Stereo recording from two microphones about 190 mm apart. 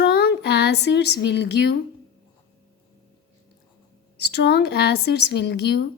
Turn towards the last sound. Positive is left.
turn(degrees=60)  # may be behind; listen again after turning